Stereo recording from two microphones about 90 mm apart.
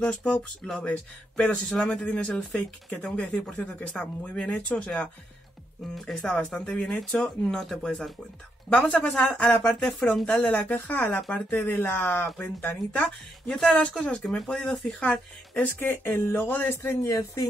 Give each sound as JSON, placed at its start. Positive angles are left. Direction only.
{"t": 0.0, "sound": "speech", "side_deg": 15}
{"t": 5.9, "sound": "speech", "side_deg": 0}
{"t": 8.7, "sound": "speech", "side_deg": 20}
{"t": 9.4, "sound": "speech", "side_deg": 10}
{"t": 10.4, "sound": "speech", "side_deg": 15}
{"t": 15.8, "sound": "speech", "side_deg": 25}